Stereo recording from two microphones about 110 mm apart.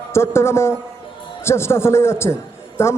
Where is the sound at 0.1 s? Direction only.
25° left (ahead or behind).